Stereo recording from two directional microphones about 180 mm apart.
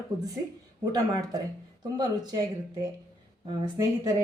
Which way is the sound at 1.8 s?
20° right (ahead or behind).